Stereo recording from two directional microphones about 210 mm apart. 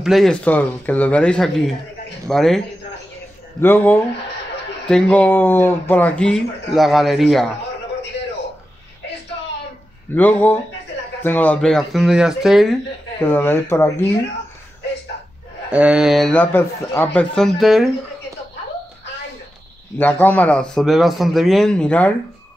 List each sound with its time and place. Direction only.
0.0 s speech: centre (ahead or behind)
3.6 s speech: 10° left (ahead or behind)
10.1 s speech: 10° left (ahead or behind)
13.2 s speech: 10° left (ahead or behind)
15.7 s speech: 5° right (ahead or behind)
20.0 s speech: 10° left (ahead or behind)